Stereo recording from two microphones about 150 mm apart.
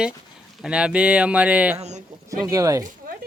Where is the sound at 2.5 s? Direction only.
20° right (ahead or behind).